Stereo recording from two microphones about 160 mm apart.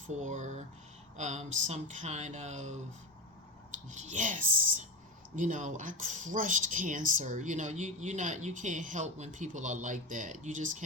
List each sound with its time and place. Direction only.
0.2 s speech: 50° right (ahead or behind)
4.1 s speech: 55° right (ahead or behind)